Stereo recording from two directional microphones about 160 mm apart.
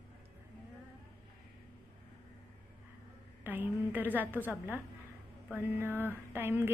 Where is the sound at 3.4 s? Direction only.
10° right (ahead or behind).